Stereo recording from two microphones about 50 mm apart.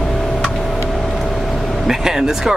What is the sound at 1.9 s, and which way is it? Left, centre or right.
Speech, centre.